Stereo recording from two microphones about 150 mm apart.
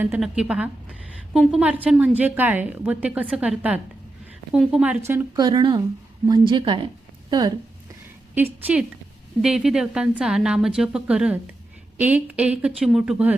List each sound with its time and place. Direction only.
0.0 s a woman's voice: 5° right (ahead or behind)
5.4 s a woman's voice: 30° right (ahead or behind)
9.4 s a woman's voice: 5° right (ahead or behind)